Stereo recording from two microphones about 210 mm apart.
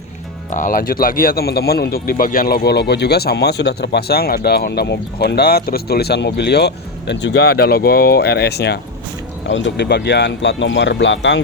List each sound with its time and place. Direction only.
0.5 s speech: 40° left (ahead or behind); by 11.3 s 60° left (ahead or behind)